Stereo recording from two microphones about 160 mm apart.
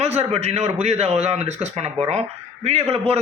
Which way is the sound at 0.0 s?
40° right (ahead or behind).